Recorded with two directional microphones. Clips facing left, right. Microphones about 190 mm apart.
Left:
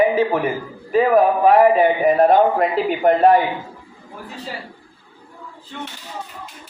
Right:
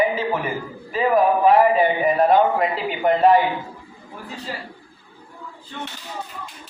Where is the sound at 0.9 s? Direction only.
45° left (ahead or behind).